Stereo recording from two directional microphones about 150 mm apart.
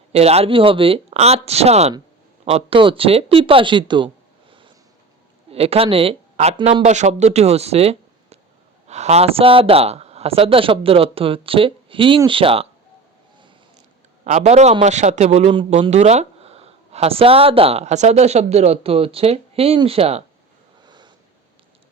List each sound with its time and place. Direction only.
0.1 s speech: 45° right (ahead or behind)
5.5 s speech: 40° right (ahead or behind)
14.3 s speech: 50° right (ahead or behind)
20.8 s snort: 30° right (ahead or behind)